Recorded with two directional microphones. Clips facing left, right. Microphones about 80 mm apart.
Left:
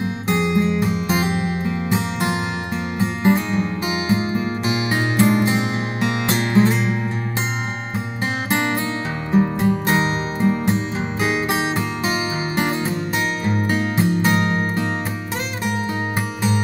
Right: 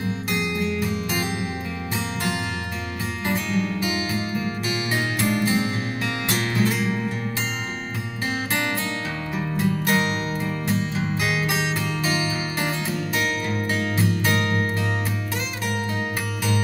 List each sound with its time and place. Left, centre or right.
0.3 s music: left
8.5 s music: left